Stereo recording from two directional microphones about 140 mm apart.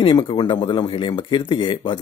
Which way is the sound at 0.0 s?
35° left (ahead or behind).